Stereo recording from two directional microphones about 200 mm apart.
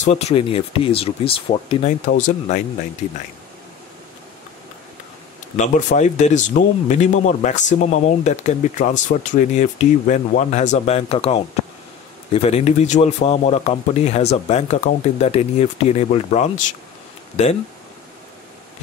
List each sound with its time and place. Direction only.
0.0 s speech: 35° left (ahead or behind)
2.0 s speech: 40° left (ahead or behind)
5.6 s speech: 35° left (ahead or behind)